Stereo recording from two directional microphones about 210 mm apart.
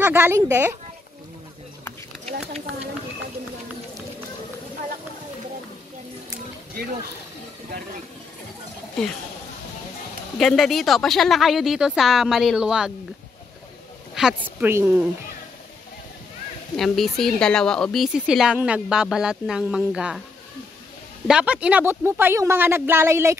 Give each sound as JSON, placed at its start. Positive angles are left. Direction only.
{"t": 0.0, "sound": "speech", "side_deg": -10}
{"t": 2.2, "sound": "a sound", "side_deg": -30}
{"t": 10.3, "sound": "speech", "side_deg": 0}
{"t": 14.1, "sound": "speech", "side_deg": -5}
{"t": 16.7, "sound": "speech", "side_deg": 0}
{"t": 21.3, "sound": "speech", "side_deg": -5}